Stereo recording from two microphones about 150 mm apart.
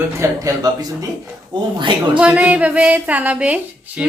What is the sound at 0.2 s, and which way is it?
Speech, 25° right (ahead or behind).